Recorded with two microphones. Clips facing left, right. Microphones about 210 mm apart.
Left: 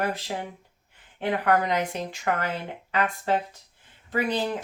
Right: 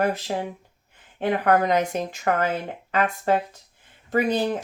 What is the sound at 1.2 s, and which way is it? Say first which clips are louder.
Speech: right 3 dB; 50° right (ahead or behind).